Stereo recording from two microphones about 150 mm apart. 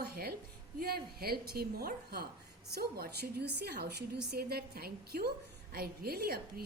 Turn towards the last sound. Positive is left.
turn(degrees=-85)